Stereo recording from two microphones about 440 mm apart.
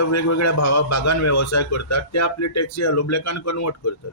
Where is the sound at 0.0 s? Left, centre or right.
Left.